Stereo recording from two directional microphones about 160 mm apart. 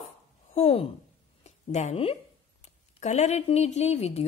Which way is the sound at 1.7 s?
45° left (ahead or behind).